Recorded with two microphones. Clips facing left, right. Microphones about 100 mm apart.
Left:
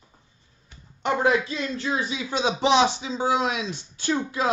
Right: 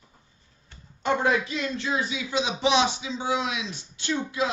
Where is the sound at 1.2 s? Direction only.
30° left (ahead or behind).